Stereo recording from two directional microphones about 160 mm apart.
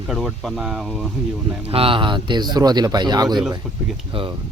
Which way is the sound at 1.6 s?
35° right (ahead or behind).